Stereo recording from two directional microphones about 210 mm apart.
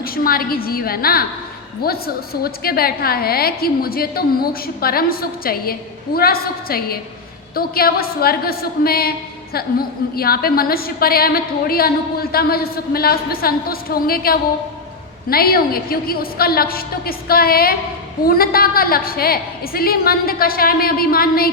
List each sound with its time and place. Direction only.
0.0 s a woman's voice: 45° left (ahead or behind)